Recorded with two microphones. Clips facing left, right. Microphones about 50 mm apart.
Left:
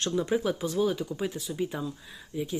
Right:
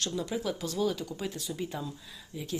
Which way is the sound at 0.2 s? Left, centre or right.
Left.